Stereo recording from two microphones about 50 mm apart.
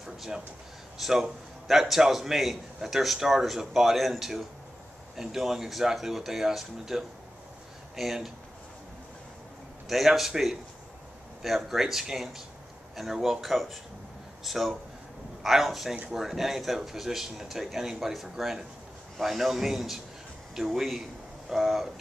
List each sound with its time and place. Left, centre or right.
0.0 s a man's voice: centre
9.8 s a man's voice: centre